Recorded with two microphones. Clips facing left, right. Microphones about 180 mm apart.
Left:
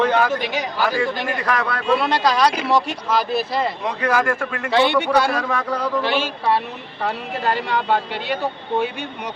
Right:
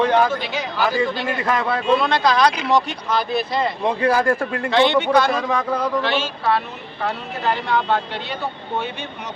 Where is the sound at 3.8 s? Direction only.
30° right (ahead or behind).